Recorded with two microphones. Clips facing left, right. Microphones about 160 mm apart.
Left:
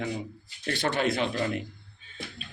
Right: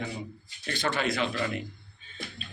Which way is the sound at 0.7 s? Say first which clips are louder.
Left 2 dB; 55° left (ahead or behind).